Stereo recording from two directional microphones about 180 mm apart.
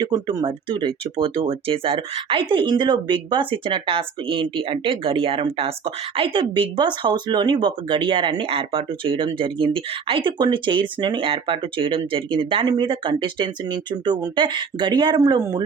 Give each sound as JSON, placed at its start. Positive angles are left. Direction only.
{"t": 0.0, "sound": "speech", "side_deg": -20}